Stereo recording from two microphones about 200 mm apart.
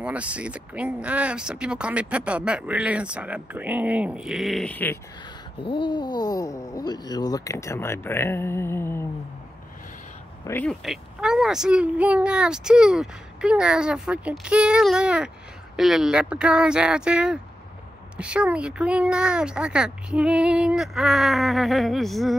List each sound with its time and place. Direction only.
0.0 s speech: 5° right (ahead or behind)
5.6 s speech: 25° left (ahead or behind)
10.4 s speech: 10° left (ahead or behind)